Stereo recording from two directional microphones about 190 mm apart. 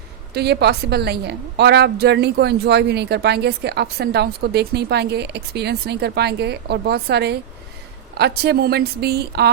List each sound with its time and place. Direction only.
0.3 s a woman's voice: 60° right (ahead or behind)